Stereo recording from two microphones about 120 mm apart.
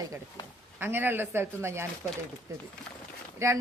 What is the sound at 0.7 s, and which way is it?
Speech, 15° right (ahead or behind).